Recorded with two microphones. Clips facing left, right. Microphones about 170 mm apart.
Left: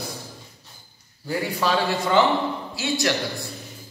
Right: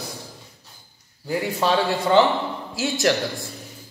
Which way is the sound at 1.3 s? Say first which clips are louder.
Right 2 dB; 25° right (ahead or behind).